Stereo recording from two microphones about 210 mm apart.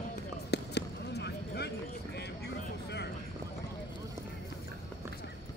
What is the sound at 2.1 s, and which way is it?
Vehicle, 50° left (ahead or behind).